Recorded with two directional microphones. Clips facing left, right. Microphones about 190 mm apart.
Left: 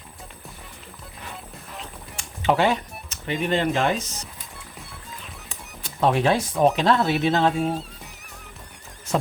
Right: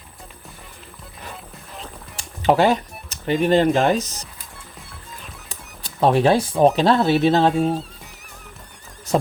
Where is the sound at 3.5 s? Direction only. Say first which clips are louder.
Right 6 dB; 40° right (ahead or behind).